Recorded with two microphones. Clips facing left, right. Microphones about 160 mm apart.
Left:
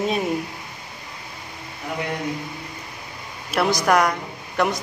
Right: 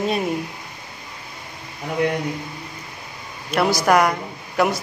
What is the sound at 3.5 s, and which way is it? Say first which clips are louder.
A man's voice: right 2 dB; 5° right (ahead or behind).